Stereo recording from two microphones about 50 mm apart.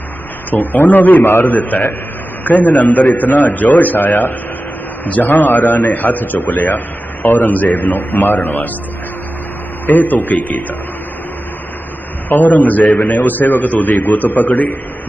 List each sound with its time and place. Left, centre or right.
0.5 s a man's voice: left
9.8 s a man's voice: left
12.3 s a man's voice: left